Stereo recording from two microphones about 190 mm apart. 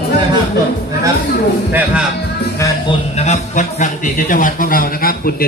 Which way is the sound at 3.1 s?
35° left (ahead or behind).